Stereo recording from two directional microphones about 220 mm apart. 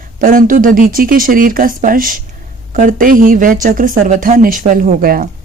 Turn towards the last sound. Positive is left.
turn(degrees=-40)  # may be behind; listen again after turning